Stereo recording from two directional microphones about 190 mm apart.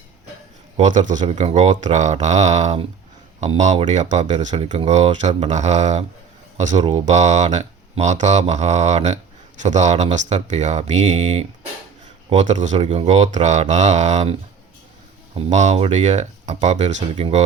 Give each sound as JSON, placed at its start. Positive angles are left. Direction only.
{"t": 0.8, "sound": "speech", "side_deg": -40}
{"t": 15.4, "sound": "speech", "side_deg": -35}